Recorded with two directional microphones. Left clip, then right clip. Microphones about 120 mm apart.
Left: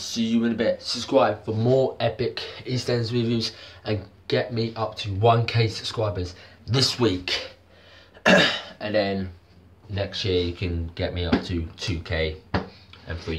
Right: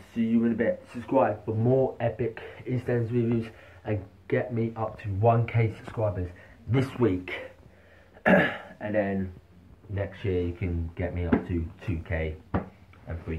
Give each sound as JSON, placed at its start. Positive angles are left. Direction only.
{"t": 0.1, "sound": "speech", "side_deg": 35}